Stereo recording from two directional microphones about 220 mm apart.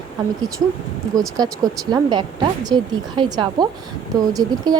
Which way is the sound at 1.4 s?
20° right (ahead or behind).